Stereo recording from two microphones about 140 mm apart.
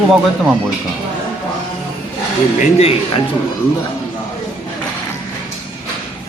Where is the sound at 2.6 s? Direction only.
50° left (ahead or behind).